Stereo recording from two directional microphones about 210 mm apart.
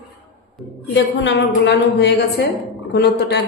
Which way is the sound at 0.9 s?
60° left (ahead or behind).